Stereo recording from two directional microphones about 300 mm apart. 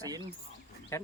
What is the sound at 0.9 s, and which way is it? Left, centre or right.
Speech, centre.